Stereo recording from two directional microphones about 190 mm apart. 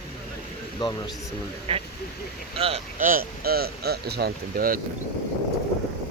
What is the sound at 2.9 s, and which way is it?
Speech, 45° right (ahead or behind).